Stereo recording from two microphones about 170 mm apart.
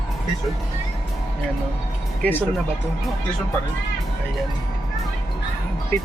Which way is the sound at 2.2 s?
10° left (ahead or behind).